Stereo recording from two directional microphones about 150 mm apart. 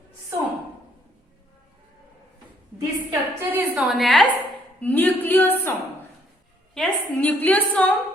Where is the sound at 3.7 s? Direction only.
Centre (ahead or behind).